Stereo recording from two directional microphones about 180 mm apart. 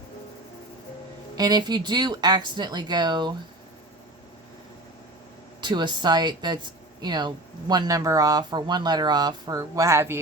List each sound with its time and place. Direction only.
1.4 s speech: 25° right (ahead or behind)
5.5 s speech: 25° right (ahead or behind)